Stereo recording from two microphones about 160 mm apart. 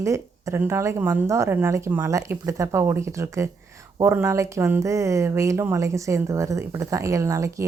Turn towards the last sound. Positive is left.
turn(degrees=-20)  # may be behind; listen again after turning